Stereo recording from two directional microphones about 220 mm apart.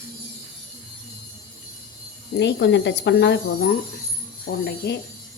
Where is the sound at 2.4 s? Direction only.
50° left (ahead or behind).